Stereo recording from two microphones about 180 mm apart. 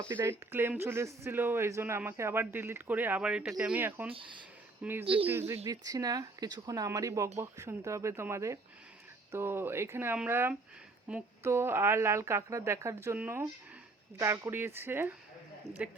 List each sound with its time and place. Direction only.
0.1 s speech: 10° right (ahead or behind)
4.1 s speech: 30° right (ahead or behind)
4.8 s speech: 10° right (ahead or behind)
5.0 s speech: 30° right (ahead or behind)
5.3 s speech: 10° right (ahead or behind)